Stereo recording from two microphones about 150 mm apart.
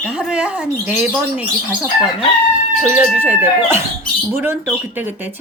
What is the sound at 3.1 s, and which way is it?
Speech, 10° right (ahead or behind).